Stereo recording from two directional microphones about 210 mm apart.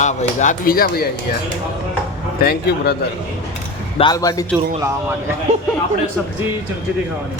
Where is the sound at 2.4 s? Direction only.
50° left (ahead or behind).